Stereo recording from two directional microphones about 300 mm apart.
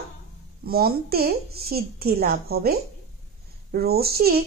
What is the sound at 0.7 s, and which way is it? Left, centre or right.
A child's voice, right.